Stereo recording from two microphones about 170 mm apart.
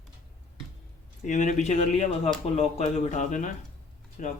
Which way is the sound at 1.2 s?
45° left (ahead or behind).